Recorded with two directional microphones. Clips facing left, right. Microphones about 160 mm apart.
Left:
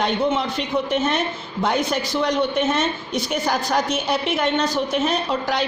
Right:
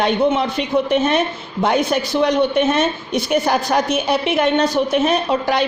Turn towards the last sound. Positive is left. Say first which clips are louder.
# right 5 dB
turn(degrees=-60)  # may be behind; listen again after turning